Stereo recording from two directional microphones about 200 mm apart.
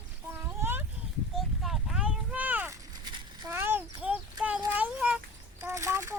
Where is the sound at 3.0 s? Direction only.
20° right (ahead or behind).